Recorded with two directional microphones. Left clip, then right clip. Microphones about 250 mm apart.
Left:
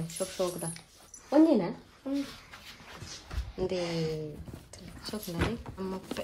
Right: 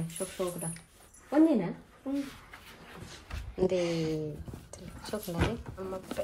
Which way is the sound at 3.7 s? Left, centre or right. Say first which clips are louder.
Right 2 dB; left.